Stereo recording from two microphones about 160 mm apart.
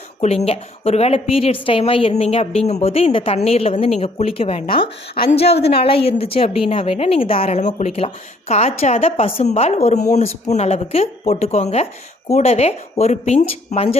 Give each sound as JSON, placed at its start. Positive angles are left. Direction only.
{"t": 0.2, "sound": "a woman's voice", "side_deg": 40}